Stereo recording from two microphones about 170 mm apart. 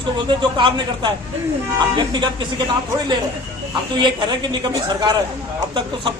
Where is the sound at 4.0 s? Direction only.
25° right (ahead or behind).